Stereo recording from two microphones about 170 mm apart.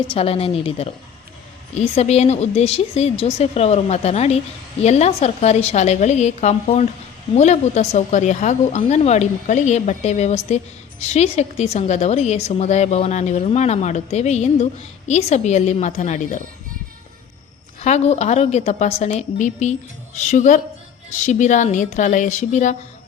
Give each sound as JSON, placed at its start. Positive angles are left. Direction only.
{"t": 0.1, "sound": "a woman's voice", "side_deg": 35}
{"t": 17.7, "sound": "a woman's voice", "side_deg": 40}